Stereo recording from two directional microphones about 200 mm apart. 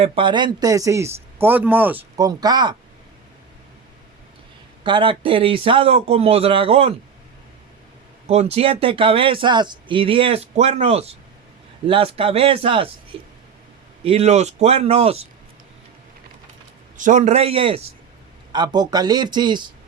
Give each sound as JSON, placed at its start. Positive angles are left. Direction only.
{"t": 0.0, "sound": "a man's voice", "side_deg": -25}
{"t": 2.1, "sound": "speech", "side_deg": -20}
{"t": 4.8, "sound": "speech", "side_deg": -25}
{"t": 8.3, "sound": "speech", "side_deg": -30}
{"t": 17.0, "sound": "speech", "side_deg": -40}